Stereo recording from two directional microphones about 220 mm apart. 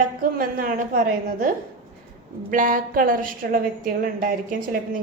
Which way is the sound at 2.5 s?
40° right (ahead or behind).